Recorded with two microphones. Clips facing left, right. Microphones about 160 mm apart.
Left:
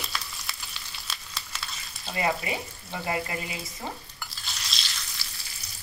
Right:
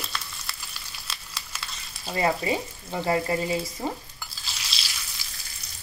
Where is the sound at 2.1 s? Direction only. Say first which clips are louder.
Right 4 dB; 35° right (ahead or behind).